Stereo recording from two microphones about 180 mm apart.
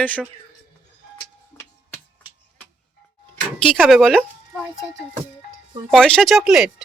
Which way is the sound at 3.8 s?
Centre (ahead or behind).